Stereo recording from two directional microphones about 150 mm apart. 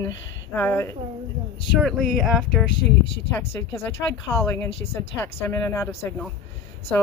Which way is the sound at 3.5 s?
15° left (ahead or behind).